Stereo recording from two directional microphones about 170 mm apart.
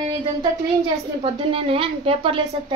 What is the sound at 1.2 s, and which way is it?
A woman's voice, 30° right (ahead or behind).